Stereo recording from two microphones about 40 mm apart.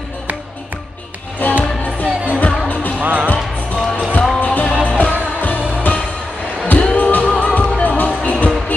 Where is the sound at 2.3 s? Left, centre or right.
Left.